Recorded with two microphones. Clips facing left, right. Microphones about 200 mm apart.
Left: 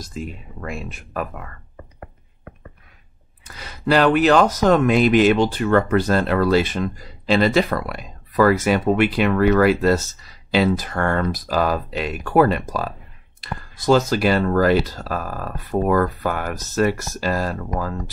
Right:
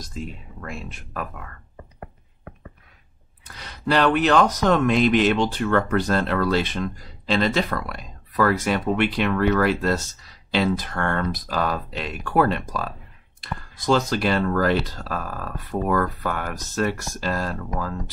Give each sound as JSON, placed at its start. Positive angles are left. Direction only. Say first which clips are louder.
{"t": 0.0, "sound": "speech", "louder": "left 3 dB", "side_deg": 10}
{"t": 3.4, "sound": "speech", "louder": "left 4 dB", "side_deg": 5}
{"t": 15.7, "sound": "speech", "louder": "left 5 dB", "side_deg": 25}
{"t": 16.2, "sound": "speech", "louder": "left 4 dB", "side_deg": 5}